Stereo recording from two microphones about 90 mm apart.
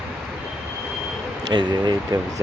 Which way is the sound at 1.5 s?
55° right (ahead or behind).